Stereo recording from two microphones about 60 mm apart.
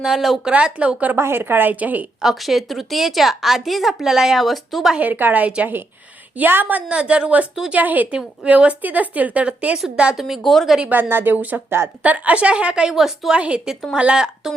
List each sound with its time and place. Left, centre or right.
0.0 s speech: centre
0.5 s a woman's voice: centre
1.1 s a woman's voice: right
2.2 s a woman's voice: centre
4.9 s a woman's voice: right
9.7 s a woman's voice: centre
10.9 s a woman's voice: right; by 13.3 s centre
13.3 s speech: centre